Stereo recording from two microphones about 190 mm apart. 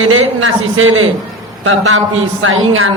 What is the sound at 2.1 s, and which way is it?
Speech, 90° right.